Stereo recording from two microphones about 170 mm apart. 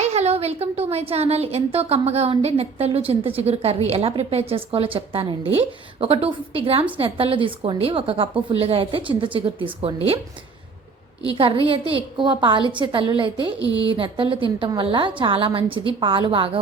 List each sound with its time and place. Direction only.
0.0 s a woman's voice: 40° right (ahead or behind)
11.3 s a woman's voice: 30° right (ahead or behind)